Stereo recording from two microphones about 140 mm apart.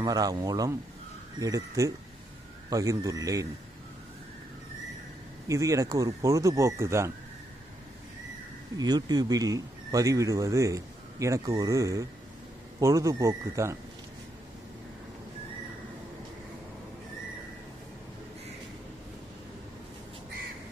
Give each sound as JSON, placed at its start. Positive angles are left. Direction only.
{"t": 0.0, "sound": "speech", "side_deg": -25}
{"t": 5.5, "sound": "speech", "side_deg": -25}
{"t": 8.7, "sound": "speech", "side_deg": -30}